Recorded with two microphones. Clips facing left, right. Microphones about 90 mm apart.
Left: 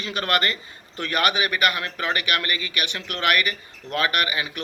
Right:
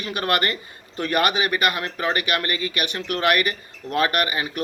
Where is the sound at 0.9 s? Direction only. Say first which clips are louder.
Right 2 dB; 40° right (ahead or behind).